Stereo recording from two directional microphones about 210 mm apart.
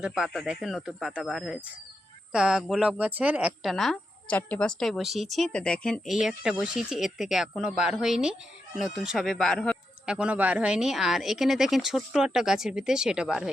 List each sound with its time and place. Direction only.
0.0 s speech: centre (ahead or behind)